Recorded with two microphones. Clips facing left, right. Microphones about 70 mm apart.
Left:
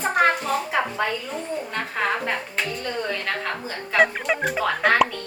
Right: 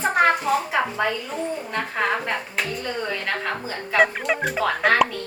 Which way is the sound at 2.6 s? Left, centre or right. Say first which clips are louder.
Even; centre.